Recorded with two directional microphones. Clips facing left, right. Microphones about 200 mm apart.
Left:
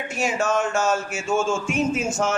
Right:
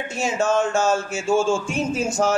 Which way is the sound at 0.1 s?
25° right (ahead or behind).